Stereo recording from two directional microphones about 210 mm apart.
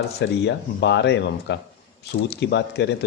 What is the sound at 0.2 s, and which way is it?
Speech, 55° left (ahead or behind).